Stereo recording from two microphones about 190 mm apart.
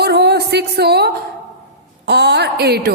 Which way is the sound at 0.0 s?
60° right (ahead or behind).